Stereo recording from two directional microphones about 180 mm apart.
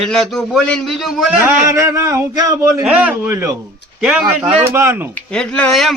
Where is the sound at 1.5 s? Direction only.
15° right (ahead or behind).